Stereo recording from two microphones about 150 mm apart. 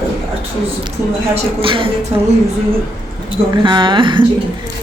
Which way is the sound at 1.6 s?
35° right (ahead or behind).